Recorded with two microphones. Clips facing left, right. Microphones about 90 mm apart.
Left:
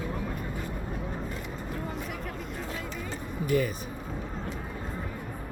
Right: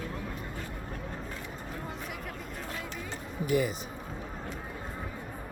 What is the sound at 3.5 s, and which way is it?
Speech, 15° right (ahead or behind).